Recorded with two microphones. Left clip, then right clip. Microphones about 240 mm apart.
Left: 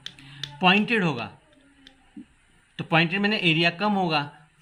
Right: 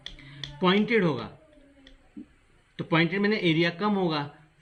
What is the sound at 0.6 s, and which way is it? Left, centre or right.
Speech, left.